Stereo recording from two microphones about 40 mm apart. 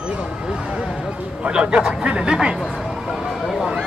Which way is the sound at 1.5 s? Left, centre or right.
Right.